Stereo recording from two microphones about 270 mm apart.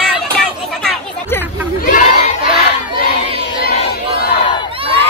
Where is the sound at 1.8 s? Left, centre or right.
Left.